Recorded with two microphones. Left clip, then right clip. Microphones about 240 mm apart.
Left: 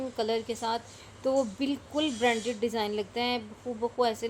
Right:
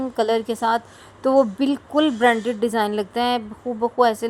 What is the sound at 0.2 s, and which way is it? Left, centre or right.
Speech, right.